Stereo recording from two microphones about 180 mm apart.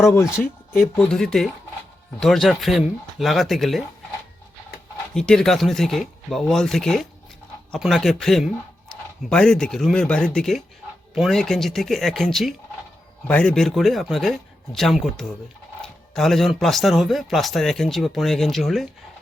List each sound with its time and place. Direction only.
0.1 s speech: 15° left (ahead or behind)
0.9 s speech: 5° left (ahead or behind)
5.1 s speech: 5° left (ahead or behind)